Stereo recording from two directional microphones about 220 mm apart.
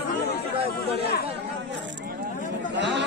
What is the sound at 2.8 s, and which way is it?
Speech, 55° right (ahead or behind).